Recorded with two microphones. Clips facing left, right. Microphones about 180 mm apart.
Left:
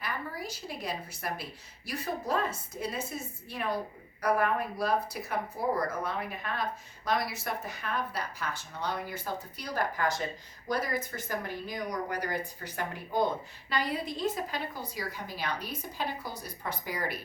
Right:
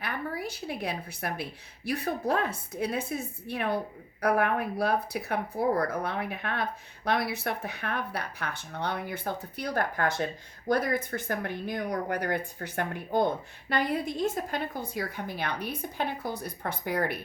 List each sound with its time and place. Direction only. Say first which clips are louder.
0.0 s speech: right 4 dB; 60° right (ahead or behind)